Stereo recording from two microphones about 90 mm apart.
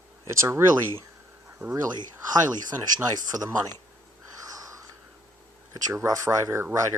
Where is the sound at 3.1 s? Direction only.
45° right (ahead or behind).